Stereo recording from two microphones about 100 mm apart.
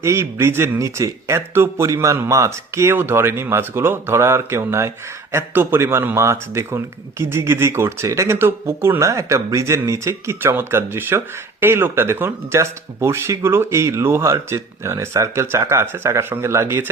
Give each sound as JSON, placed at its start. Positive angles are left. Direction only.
{"t": 0.0, "sound": "speech", "side_deg": -25}